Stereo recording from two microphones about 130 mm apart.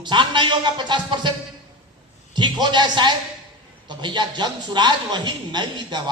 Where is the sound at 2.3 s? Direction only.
35° right (ahead or behind).